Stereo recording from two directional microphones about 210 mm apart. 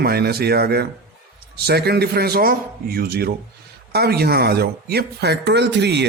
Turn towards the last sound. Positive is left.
turn(degrees=-55)  # may be behind; listen again after turning